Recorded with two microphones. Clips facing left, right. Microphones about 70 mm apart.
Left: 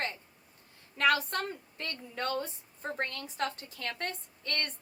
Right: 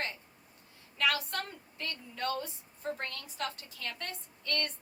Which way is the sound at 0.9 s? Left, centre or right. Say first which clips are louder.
Left 4 dB; left.